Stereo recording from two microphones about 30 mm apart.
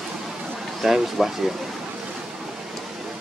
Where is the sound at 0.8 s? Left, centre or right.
Centre.